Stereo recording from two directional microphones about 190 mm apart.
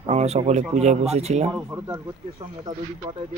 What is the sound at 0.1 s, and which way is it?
Speech, 35° right (ahead or behind).